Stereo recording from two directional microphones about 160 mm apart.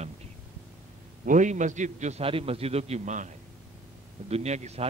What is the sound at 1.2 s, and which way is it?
A man's voice, 50° right (ahead or behind).